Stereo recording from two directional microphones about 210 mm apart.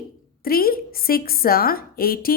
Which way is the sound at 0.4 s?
45° left (ahead or behind).